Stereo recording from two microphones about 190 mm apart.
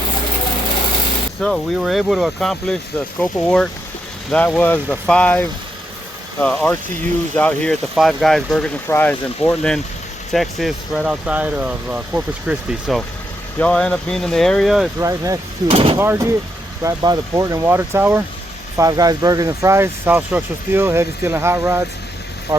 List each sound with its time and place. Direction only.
1.4 s speech: centre (ahead or behind)
14.9 s speech: 15° right (ahead or behind)
15.6 s speech: 30° right (ahead or behind)
16.0 s speech: 15° right (ahead or behind)